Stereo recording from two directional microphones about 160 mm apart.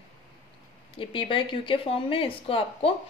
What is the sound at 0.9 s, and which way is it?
A woman's voice, 35° left (ahead or behind).